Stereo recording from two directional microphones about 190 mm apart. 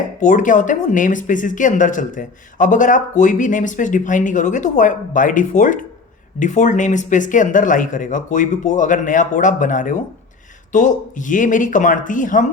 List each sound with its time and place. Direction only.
0.2 s speech: 40° left (ahead or behind)